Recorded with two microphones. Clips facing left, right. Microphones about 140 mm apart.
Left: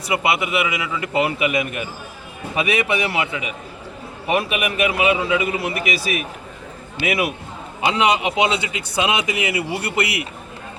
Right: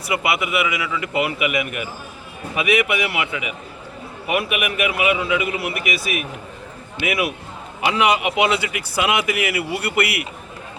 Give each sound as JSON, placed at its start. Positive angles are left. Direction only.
{"t": 0.1, "sound": "a man's voice", "side_deg": 25}